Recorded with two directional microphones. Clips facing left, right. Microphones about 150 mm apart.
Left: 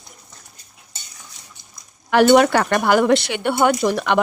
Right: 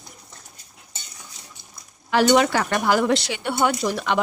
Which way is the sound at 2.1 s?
55° left (ahead or behind).